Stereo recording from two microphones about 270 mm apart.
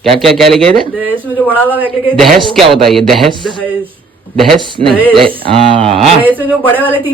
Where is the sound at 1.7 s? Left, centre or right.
Centre.